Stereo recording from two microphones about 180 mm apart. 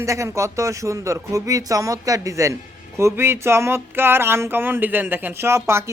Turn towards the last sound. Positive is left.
turn(degrees=-15)  # may be behind; listen again after turning